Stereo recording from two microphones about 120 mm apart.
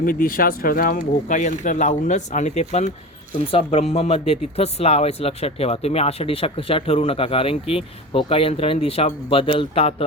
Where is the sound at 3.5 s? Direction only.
50° left (ahead or behind).